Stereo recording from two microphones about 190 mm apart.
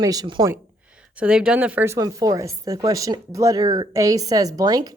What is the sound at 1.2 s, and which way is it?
A woman's voice, 5° right (ahead or behind).